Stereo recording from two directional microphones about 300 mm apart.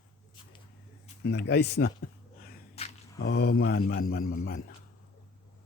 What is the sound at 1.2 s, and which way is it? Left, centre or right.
Speech, left.